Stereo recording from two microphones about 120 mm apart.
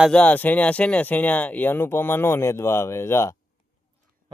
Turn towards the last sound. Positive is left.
turn(degrees=20)  # may be behind; listen again after turning